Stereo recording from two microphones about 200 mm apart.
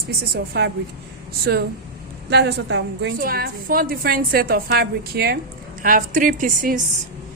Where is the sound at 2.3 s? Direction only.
55° right (ahead or behind).